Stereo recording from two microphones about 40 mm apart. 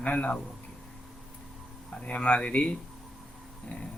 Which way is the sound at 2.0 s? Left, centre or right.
Left.